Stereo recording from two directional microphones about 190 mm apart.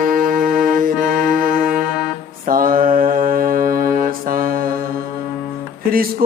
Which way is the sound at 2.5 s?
50° right (ahead or behind).